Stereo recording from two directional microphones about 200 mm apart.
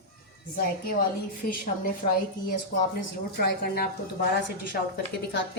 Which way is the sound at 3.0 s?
50° left (ahead or behind).